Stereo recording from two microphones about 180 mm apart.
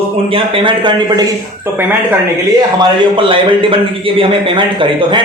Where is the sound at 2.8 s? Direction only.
25° right (ahead or behind).